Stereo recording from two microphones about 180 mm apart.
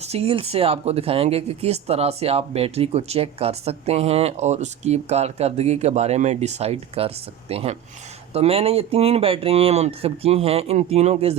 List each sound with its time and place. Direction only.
0.0 s speech: 35° right (ahead or behind)